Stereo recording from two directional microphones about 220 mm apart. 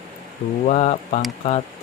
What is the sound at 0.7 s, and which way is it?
Speech, 30° left (ahead or behind).